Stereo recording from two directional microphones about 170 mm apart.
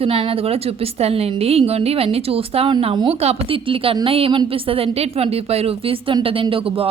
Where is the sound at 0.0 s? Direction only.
35° right (ahead or behind).